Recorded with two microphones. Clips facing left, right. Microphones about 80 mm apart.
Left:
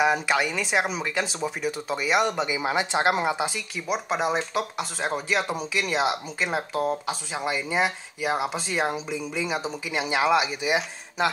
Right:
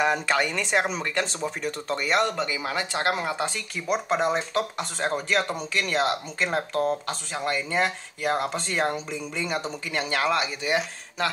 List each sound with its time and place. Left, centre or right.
0.0 s speech: centre
3.3 s speech: centre